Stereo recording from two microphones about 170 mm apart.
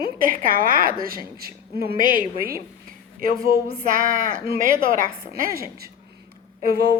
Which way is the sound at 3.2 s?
60° right (ahead or behind).